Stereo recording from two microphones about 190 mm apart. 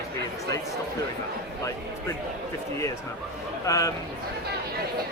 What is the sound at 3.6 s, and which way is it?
Speech, 20° left (ahead or behind).